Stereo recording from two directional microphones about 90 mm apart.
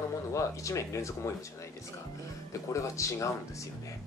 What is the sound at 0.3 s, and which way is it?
Speech, 35° left (ahead or behind).